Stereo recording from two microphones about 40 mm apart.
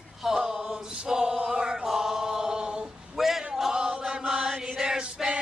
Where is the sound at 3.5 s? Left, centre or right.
Centre.